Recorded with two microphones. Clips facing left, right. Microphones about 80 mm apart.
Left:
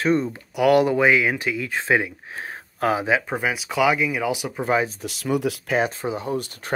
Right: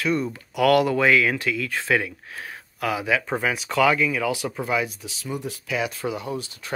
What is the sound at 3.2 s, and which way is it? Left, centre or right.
Speech, centre.